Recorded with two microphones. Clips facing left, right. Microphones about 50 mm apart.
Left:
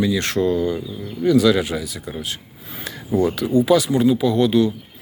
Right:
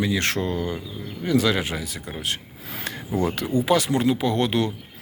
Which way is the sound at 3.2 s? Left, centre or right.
Right.